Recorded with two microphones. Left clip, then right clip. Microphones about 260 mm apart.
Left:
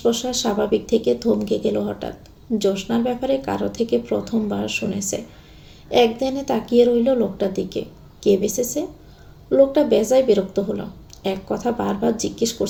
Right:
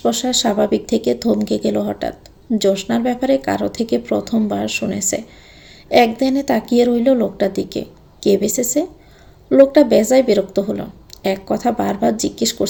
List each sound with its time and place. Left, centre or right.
0.0 s speech: right